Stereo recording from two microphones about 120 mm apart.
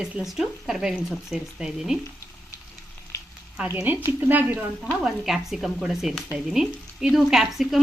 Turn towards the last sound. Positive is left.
turn(degrees=0)  # may be behind; listen again after turning